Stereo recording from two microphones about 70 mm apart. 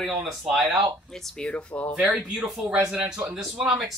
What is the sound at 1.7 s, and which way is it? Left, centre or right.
Speech, left.